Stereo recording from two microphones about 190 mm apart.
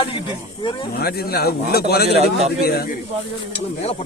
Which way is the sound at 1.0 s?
55° left (ahead or behind).